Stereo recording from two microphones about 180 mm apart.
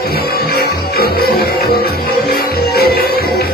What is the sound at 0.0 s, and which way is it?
Music, 55° left (ahead or behind).